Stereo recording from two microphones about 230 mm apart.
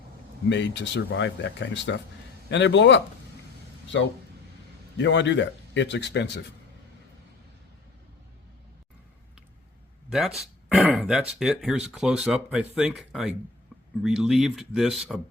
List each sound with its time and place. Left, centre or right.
0.4 s speech: left
4.9 s speech: left
10.1 s speech: centre